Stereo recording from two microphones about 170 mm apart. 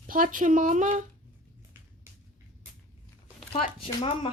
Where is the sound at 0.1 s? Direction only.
50° right (ahead or behind).